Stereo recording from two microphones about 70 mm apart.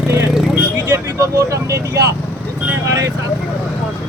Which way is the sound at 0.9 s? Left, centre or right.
Right.